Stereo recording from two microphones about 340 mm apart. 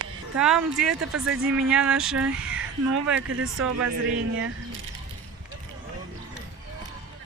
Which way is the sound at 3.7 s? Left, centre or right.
Right.